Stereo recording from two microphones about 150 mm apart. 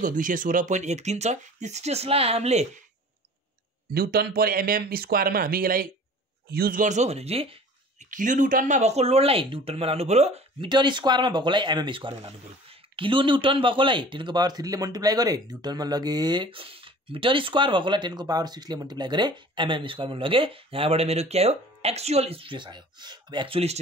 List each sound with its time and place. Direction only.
0.0 s speech: 60° right (ahead or behind); by 2.7 s 45° right (ahead or behind)
3.9 s speech: 90° right; by 7.5 s 40° right (ahead or behind)
8.0 s speech: 60° right (ahead or behind); by 23.8 s 40° right (ahead or behind)